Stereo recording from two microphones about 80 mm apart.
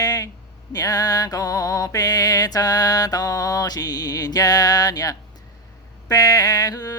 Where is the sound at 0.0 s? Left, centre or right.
Left.